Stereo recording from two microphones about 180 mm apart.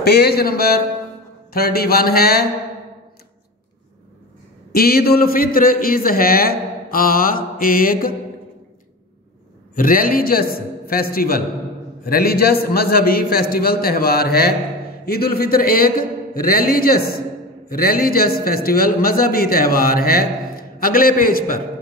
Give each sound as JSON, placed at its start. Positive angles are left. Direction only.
{"t": 0.0, "sound": "a man's voice", "side_deg": 65}
{"t": 4.7, "sound": "a man's voice", "side_deg": 60}
{"t": 9.8, "sound": "a man's voice", "side_deg": 50}